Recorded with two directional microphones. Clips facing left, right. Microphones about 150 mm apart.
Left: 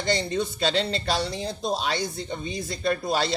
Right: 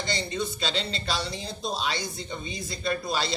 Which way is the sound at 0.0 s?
55° left (ahead or behind).